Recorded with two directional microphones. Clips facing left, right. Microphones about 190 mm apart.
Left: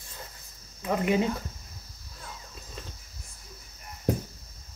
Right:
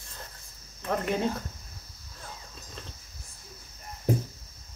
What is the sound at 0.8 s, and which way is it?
Speech, 10° left (ahead or behind).